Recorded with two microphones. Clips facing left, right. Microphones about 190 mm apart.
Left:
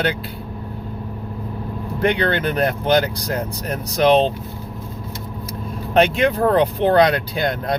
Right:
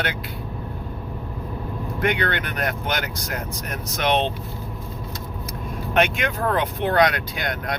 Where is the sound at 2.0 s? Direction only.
35° left (ahead or behind).